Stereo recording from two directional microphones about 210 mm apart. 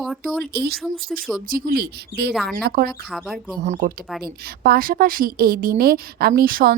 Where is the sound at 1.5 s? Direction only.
45° right (ahead or behind).